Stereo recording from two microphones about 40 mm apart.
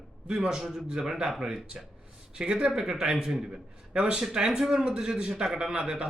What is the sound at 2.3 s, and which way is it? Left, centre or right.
Speech, right.